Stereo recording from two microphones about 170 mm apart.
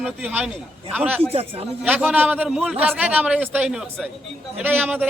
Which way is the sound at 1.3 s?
35° right (ahead or behind).